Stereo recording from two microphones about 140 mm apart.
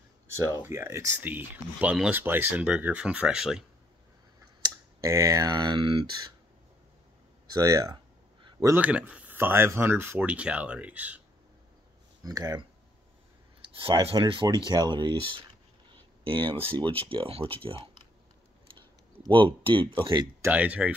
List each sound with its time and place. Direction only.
0.4 s speech: 20° right (ahead or behind)
4.6 s speech: 25° right (ahead or behind)
7.5 s speech: 25° right (ahead or behind)
8.5 s a sound: 30° right (ahead or behind)
8.7 s speech: 10° right (ahead or behind)
12.3 s speech: 25° right (ahead or behind)
13.6 s speech: 40° right (ahead or behind)
18.8 s speech: 35° right (ahead or behind)
20.4 s speech: 10° right (ahead or behind)